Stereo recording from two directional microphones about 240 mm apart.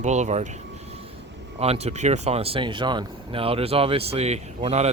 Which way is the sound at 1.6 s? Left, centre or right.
Right.